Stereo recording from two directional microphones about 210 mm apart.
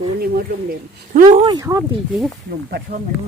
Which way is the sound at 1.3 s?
20° right (ahead or behind).